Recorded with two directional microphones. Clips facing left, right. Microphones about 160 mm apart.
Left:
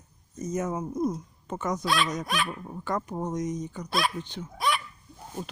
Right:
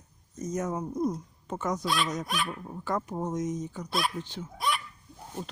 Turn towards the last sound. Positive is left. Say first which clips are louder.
# left 2 dB
turn(degrees=10)  # may be behind; listen again after turning